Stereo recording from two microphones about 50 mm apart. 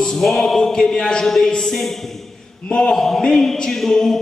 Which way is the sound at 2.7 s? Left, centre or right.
Centre.